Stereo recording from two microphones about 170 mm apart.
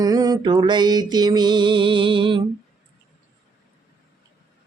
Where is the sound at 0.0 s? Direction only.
20° right (ahead or behind).